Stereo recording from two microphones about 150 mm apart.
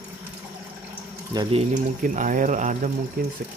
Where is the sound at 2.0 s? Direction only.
60° right (ahead or behind).